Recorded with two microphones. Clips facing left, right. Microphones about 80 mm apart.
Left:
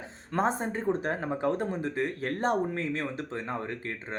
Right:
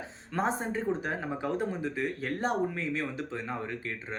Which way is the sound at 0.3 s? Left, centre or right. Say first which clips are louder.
Left 2 dB; left.